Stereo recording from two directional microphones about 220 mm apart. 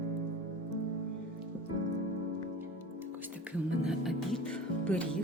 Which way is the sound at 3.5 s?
5° right (ahead or behind).